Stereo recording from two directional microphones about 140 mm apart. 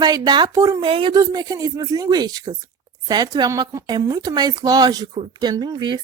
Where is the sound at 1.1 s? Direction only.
25° right (ahead or behind).